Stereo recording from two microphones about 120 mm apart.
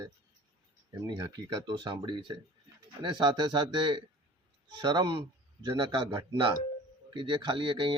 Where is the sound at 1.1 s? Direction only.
35° right (ahead or behind).